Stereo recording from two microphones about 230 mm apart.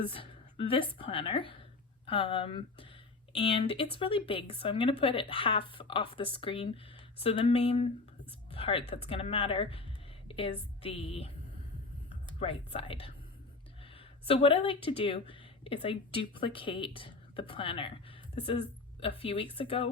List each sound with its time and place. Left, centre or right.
0.0 s a woman's voice: left
12.4 s speech: left